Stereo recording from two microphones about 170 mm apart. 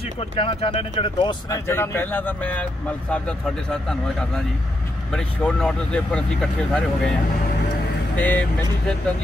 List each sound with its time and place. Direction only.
0.2 s speech: 35° left (ahead or behind)
1.7 s speech: 15° left (ahead or behind)
8.2 s speech: 10° left (ahead or behind)